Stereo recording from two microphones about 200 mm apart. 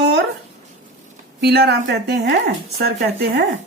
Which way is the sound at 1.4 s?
55° right (ahead or behind).